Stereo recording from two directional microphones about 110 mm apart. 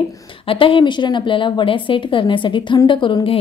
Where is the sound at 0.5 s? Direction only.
50° left (ahead or behind).